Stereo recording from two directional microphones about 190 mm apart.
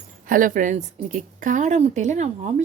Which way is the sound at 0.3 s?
45° right (ahead or behind).